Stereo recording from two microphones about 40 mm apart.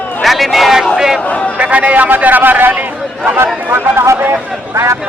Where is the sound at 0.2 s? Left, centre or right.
Centre.